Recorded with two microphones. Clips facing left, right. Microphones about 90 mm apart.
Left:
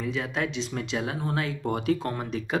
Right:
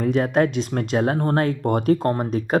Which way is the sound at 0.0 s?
50° right (ahead or behind).